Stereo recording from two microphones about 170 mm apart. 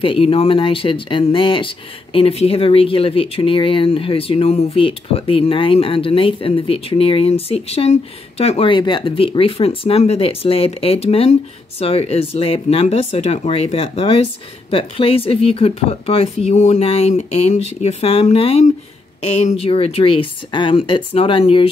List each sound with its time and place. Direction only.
0.0 s speech: 35° left (ahead or behind)